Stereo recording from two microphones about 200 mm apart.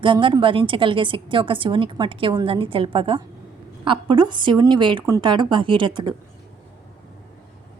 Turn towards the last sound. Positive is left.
turn(degrees=-25)  # may be behind; listen again after turning